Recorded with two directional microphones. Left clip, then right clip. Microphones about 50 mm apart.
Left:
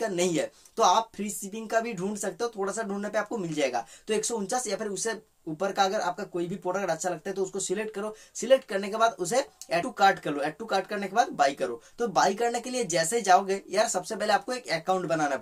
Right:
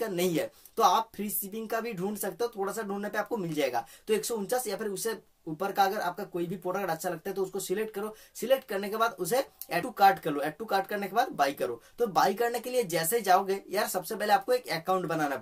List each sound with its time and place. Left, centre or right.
0.0 s speech: right